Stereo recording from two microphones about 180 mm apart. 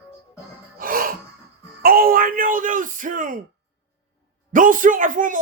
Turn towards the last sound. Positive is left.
turn(degrees=-45)  # may be behind; listen again after turning